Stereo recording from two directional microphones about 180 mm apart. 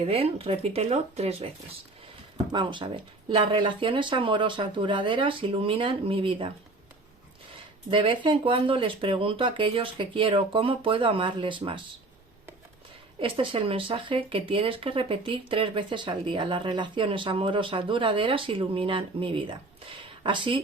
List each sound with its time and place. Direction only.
0.0 s speech: 30° right (ahead or behind)
2.5 s speech: 25° right (ahead or behind)
7.9 s speech: 30° right (ahead or behind)
13.1 s speech: 30° right (ahead or behind)